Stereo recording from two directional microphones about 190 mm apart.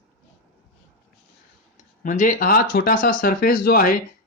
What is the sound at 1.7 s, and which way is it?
Speech, 40° left (ahead or behind).